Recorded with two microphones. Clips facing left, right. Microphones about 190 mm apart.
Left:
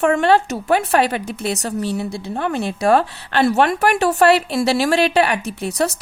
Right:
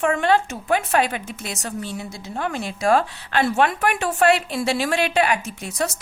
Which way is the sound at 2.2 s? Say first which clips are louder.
Left 4 dB; 35° left (ahead or behind).